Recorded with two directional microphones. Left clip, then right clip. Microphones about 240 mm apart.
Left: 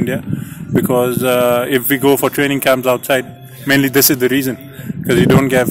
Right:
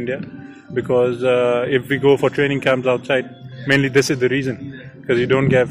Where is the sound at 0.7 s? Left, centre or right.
Left.